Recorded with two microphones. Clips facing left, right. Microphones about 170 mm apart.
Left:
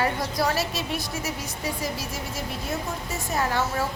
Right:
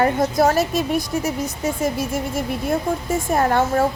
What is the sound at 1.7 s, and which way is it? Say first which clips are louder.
A woman's voice: right 8 dB; 50° right (ahead or behind).